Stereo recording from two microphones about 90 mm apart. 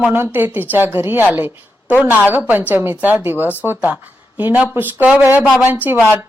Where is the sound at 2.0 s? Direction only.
20° right (ahead or behind).